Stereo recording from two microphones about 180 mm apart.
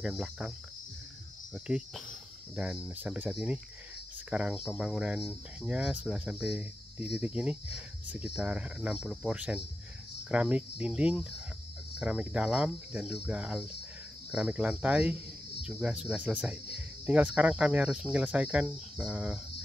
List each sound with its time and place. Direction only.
0.0 s speech: 5° right (ahead or behind)
1.5 s speech: centre (ahead or behind)